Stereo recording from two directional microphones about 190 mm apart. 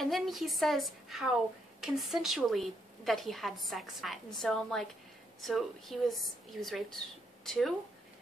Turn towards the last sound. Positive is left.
turn(degrees=0)  # may be behind; listen again after turning